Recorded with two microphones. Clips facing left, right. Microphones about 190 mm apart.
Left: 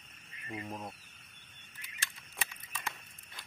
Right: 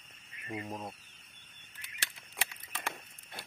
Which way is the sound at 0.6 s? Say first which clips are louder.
Right 1 dB; 15° right (ahead or behind).